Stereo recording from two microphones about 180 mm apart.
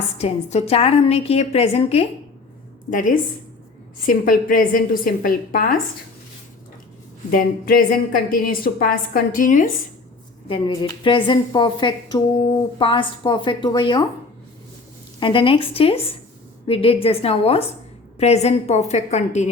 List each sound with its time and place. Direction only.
0.2 s a woman's voice: 35° left (ahead or behind)
2.9 s a woman's voice: 45° left (ahead or behind)
7.3 s a woman's voice: 50° left (ahead or behind)
10.5 s a woman's voice: 25° left (ahead or behind)
15.2 s a woman's voice: 30° left (ahead or behind)